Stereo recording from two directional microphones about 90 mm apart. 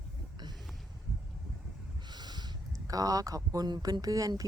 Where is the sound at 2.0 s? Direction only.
50° right (ahead or behind).